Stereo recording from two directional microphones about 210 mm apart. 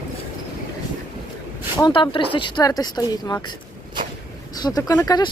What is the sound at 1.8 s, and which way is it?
Speech, 25° left (ahead or behind).